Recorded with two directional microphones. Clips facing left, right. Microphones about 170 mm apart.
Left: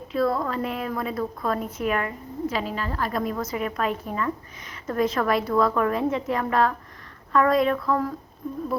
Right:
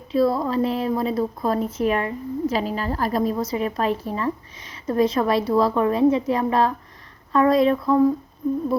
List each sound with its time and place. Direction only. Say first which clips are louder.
0.1 s a woman's voice: right 4 dB; 30° right (ahead or behind)